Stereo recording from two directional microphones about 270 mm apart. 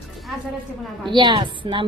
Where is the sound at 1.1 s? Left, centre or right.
Centre.